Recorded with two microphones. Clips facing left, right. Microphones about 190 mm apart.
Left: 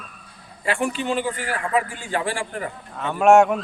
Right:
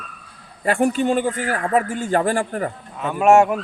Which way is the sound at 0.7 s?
45° right (ahead or behind).